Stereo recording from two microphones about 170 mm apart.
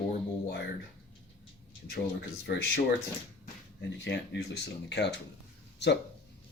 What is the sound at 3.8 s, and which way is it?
Speech, 90° left.